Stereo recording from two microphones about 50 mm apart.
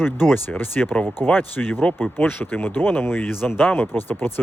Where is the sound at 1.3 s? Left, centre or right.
Left.